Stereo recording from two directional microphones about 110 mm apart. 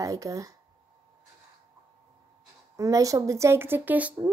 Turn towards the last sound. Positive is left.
turn(degrees=-15)  # may be behind; listen again after turning